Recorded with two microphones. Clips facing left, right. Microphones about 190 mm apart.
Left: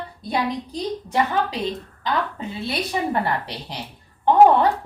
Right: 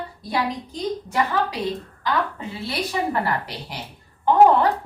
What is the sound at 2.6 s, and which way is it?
A woman's voice, 20° left (ahead or behind).